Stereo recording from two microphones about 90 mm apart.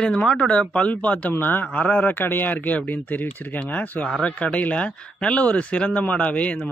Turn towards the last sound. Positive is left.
turn(degrees=15)  # may be behind; listen again after turning